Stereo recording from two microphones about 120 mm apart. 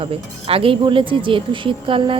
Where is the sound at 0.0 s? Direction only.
55° right (ahead or behind).